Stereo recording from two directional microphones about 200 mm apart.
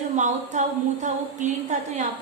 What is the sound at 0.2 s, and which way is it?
Speech, 40° right (ahead or behind).